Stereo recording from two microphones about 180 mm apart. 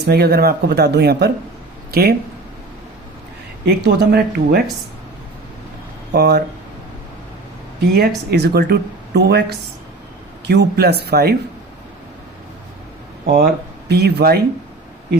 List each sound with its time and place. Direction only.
0.0 s a woman's voice: 65° right (ahead or behind)
3.7 s a woman's voice: 65° right (ahead or behind)
6.1 s a woman's voice: 65° right (ahead or behind)
7.9 s a woman's voice: 65° right (ahead or behind)
13.3 s speech: 60° right (ahead or behind)